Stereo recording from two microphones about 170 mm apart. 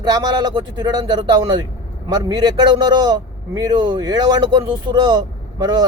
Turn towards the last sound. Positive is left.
turn(degrees=-25)  # may be behind; listen again after turning